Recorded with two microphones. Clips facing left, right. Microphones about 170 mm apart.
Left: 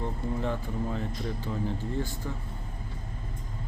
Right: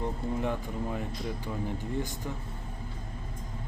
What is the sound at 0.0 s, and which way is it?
Speech, 15° right (ahead or behind).